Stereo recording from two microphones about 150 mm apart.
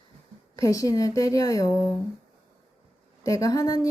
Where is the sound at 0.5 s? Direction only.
20° left (ahead or behind).